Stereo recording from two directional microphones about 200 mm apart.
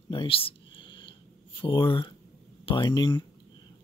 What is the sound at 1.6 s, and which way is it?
Speech, 25° left (ahead or behind).